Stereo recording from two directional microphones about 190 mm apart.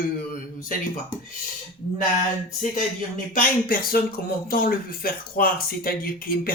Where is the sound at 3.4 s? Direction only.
50° left (ahead or behind).